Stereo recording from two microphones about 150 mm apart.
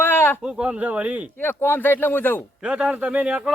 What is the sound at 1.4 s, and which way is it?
A man's voice, 15° left (ahead or behind).